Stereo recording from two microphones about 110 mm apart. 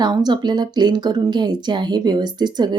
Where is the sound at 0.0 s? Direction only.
35° right (ahead or behind).